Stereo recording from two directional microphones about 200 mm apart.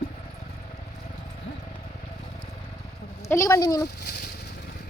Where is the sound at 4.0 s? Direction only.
50° left (ahead or behind).